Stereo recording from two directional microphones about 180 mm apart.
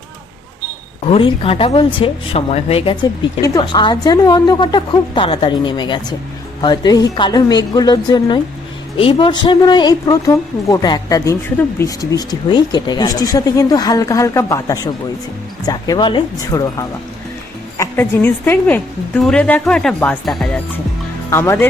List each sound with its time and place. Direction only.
1.1 s a woman's voice: 30° left (ahead or behind); by 20.6 s 5° left (ahead or behind)
21.2 s speech: 15° left (ahead or behind)